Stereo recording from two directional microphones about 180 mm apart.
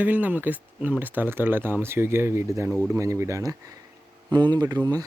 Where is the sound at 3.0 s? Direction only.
15° right (ahead or behind).